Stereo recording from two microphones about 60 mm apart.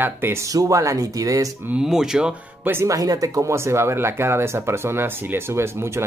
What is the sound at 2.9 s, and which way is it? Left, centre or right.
Speech, right.